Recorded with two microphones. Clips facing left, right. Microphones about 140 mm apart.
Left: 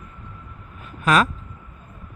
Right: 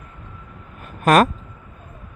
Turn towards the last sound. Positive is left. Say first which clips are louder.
# right 5 dB
turn(degrees=-50)  # may be behind; listen again after turning